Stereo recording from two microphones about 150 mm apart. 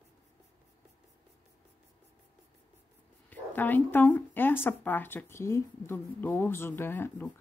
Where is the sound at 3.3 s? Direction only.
10° left (ahead or behind).